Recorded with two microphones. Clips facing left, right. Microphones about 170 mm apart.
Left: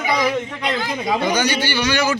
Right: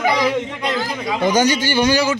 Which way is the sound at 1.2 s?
45° right (ahead or behind).